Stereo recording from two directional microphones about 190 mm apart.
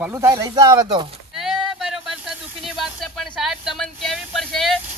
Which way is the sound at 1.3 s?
Centre (ahead or behind).